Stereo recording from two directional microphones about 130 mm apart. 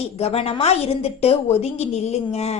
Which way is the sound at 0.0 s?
55° left (ahead or behind).